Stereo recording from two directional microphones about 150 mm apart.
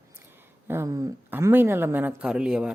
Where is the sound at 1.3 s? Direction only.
15° right (ahead or behind).